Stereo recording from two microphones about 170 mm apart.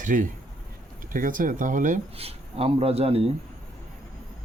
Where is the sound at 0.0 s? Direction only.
50° right (ahead or behind).